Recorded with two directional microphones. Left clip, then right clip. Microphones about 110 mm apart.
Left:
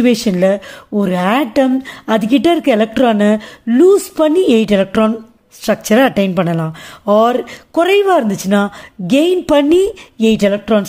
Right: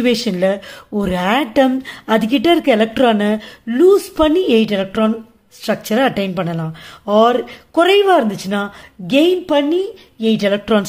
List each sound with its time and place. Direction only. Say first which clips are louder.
0.0 s a woman's voice: left 3 dB; 35° left (ahead or behind)
0.9 s a woman's voice: left 2 dB; 25° left (ahead or behind); by 5.1 s 60° left (ahead or behind)
5.6 s speech: left 4 dB; 45° left (ahead or behind); by 10.4 s 80° left
10.7 s speech: left 1 dB; 15° left (ahead or behind)